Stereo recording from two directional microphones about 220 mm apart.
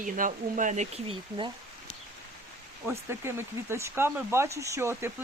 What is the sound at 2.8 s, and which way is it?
Speech, 10° right (ahead or behind).